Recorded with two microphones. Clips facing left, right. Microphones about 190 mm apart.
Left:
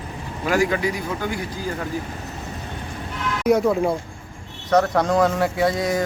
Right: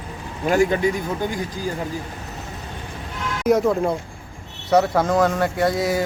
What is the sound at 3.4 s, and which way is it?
Speech, centre (ahead or behind).